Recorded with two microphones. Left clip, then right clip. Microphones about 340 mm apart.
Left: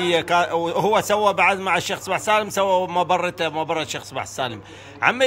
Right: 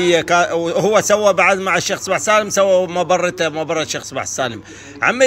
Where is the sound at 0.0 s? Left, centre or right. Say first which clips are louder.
Right 5 dB; centre.